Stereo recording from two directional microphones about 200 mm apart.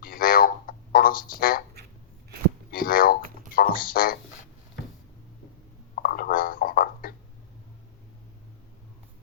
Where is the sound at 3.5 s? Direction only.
45° left (ahead or behind).